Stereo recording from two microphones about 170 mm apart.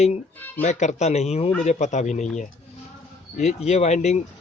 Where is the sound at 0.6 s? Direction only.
45° left (ahead or behind).